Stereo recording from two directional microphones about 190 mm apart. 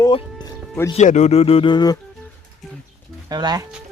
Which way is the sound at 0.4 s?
20° left (ahead or behind).